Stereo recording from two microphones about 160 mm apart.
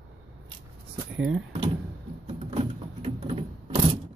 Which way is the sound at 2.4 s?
35° right (ahead or behind).